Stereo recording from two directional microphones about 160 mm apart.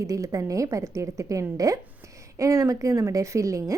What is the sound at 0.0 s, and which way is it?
A woman's voice, 20° right (ahead or behind).